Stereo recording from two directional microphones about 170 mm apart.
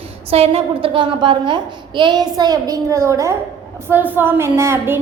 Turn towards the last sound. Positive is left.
turn(degrees=-15)  # may be behind; listen again after turning